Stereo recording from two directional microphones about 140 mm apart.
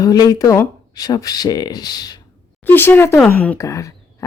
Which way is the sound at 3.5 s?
20° left (ahead or behind).